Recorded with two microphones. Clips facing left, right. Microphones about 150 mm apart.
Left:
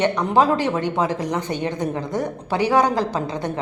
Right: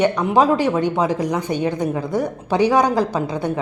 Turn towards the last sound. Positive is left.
turn(degrees=-10)  # may be behind; listen again after turning